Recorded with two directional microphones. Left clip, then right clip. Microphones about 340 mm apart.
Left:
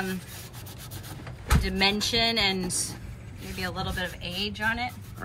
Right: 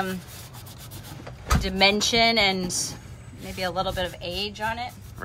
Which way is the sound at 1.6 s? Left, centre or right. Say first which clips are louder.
Right 5 dB; right.